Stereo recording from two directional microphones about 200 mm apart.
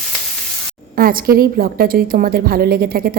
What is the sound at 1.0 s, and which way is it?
A woman's voice, 45° right (ahead or behind).